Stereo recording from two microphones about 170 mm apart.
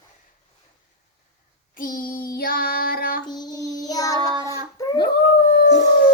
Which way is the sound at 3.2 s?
25° left (ahead or behind).